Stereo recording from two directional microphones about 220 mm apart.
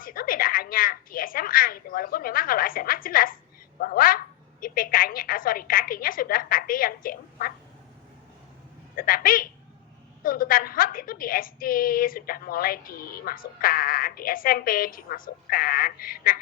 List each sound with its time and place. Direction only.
0.0 s a woman's voice: 40° left (ahead or behind)
9.0 s a woman's voice: 40° left (ahead or behind)